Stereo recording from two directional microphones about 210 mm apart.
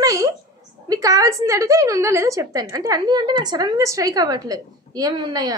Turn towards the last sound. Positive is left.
turn(degrees=-20)  # may be behind; listen again after turning